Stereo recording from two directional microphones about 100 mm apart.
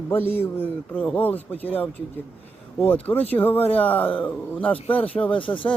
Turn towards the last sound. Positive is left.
turn(degrees=60)  # may be behind; listen again after turning